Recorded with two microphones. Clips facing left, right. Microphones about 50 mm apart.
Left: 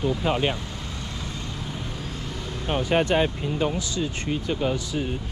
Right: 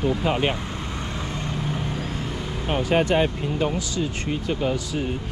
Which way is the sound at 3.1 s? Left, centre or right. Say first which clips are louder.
Right 1 dB; right.